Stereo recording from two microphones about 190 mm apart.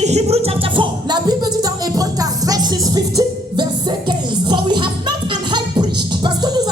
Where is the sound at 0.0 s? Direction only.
35° right (ahead or behind).